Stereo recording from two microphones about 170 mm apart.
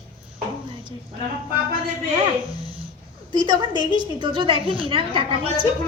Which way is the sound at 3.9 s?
25° right (ahead or behind).